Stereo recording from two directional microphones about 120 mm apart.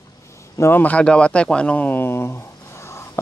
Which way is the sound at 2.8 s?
20° left (ahead or behind).